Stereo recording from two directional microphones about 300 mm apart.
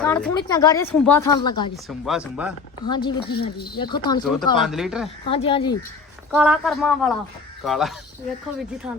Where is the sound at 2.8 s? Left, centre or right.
Centre.